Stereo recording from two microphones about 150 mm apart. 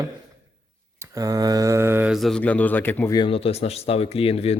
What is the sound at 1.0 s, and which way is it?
Mantra, 25° right (ahead or behind).